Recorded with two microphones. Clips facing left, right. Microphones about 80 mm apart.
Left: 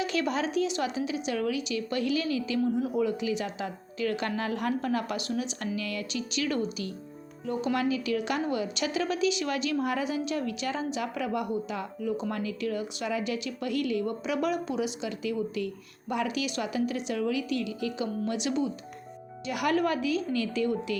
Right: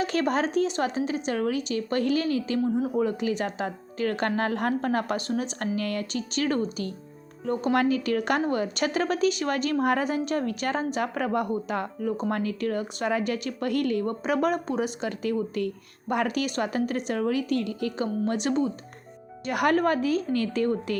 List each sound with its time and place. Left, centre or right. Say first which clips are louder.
0.0 s a woman's voice: right 4 dB; right
2.6 s a woman's voice: right 2 dB; right